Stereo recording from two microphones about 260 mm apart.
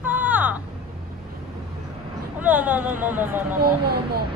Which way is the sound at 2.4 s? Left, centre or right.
Centre.